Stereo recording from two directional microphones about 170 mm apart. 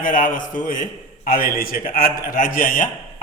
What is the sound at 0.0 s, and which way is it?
A man's voice, 50° left (ahead or behind).